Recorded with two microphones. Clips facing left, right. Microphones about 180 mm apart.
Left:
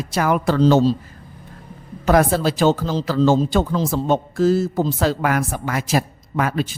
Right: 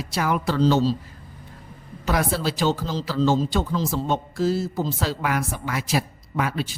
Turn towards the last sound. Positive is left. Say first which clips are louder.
# left 4 dB
turn(degrees=50)  # may be behind; listen again after turning